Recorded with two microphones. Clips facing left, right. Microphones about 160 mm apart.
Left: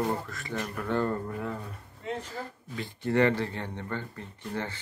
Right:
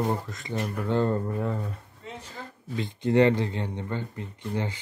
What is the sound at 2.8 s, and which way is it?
Speech, 20° right (ahead or behind).